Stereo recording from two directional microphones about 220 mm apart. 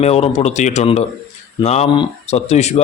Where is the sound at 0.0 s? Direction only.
30° left (ahead or behind).